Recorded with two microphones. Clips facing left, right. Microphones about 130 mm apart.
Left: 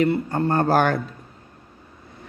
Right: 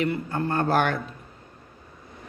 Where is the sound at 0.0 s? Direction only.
40° left (ahead or behind).